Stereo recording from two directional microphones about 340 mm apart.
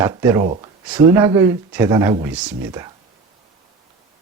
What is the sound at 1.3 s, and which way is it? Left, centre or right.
Speech, centre.